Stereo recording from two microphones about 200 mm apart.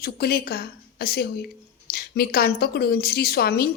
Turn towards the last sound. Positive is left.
turn(degrees=50)  # may be behind; listen again after turning